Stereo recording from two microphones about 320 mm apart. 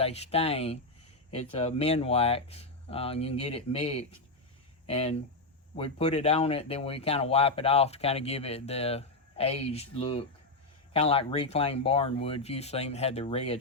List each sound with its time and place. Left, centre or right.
0.0 s speech: centre